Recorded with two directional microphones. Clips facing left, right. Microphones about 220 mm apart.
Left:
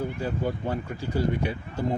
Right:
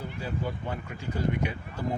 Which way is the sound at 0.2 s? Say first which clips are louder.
Left 5 dB; 45° left (ahead or behind).